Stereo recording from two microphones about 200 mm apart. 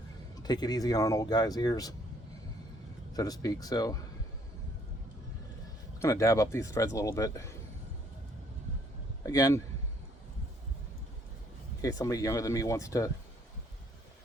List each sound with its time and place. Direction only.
0.4 s speech: 20° left (ahead or behind)
3.1 s speech: 20° left (ahead or behind)
6.0 s speech: 15° left (ahead or behind)
9.2 s speech: 15° left (ahead or behind)
11.8 s speech: 15° left (ahead or behind)